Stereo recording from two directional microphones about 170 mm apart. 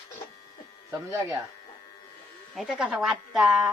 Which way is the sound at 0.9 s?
15° right (ahead or behind).